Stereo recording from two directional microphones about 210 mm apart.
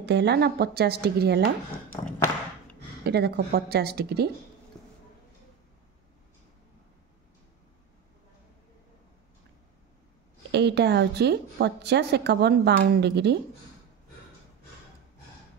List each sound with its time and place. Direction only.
0.0 s a woman's voice: 55° right (ahead or behind)
1.9 s a sound: 10° left (ahead or behind)
3.0 s a woman's voice: 50° right (ahead or behind)
10.5 s a woman's voice: 55° right (ahead or behind)